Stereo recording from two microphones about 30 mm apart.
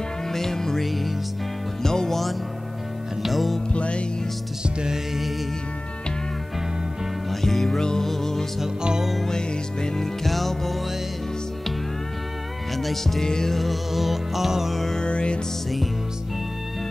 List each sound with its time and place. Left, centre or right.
0.3 s music: centre
0.8 s music: centre
1.8 s music: centre
3.2 s music: centre
3.7 s music: left
4.6 s music: right
7.4 s music: centre
8.6 s music: right
9.3 s music: left
10.2 s music: centre
12.7 s music: centre
13.6 s music: centre
15.0 s music: left